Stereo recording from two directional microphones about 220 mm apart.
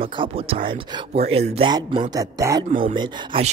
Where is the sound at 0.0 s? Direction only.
25° right (ahead or behind).